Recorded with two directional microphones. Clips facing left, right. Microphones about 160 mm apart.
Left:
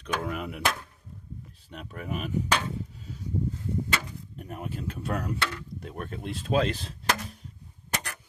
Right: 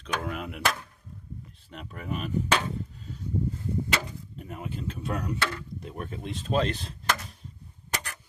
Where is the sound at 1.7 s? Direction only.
Centre (ahead or behind).